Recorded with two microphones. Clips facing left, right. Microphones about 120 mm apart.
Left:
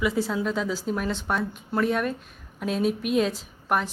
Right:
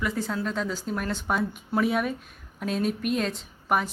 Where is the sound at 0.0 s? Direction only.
5° left (ahead or behind).